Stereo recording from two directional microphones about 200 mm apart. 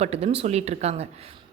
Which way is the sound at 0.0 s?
30° right (ahead or behind).